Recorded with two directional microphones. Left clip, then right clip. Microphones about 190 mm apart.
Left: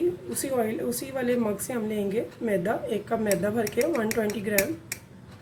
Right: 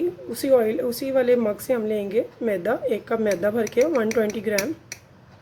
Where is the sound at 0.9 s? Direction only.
45° right (ahead or behind).